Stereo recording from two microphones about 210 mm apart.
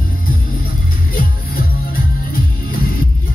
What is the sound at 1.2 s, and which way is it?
Music, 45° left (ahead or behind).